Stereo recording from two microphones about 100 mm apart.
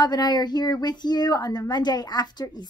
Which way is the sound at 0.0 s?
45° left (ahead or behind).